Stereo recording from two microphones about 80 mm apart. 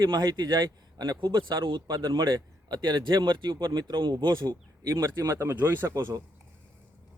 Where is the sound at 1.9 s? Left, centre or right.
Right.